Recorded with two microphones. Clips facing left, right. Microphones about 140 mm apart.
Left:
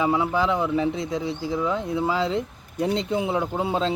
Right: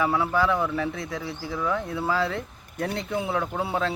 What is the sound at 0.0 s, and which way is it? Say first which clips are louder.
Speech: left 1 dB; 20° left (ahead or behind).